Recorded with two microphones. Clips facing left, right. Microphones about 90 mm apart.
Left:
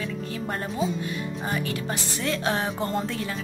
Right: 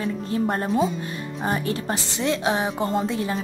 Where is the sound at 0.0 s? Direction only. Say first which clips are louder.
Right 7 dB; 30° right (ahead or behind).